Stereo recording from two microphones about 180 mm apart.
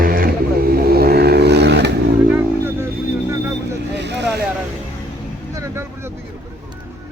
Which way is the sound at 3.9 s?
75° right (ahead or behind).